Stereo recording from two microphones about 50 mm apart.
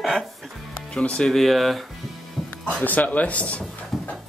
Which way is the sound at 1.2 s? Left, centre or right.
Centre.